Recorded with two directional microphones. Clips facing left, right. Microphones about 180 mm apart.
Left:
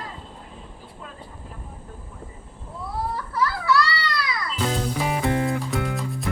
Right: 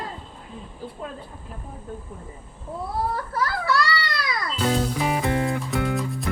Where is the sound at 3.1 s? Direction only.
50° right (ahead or behind).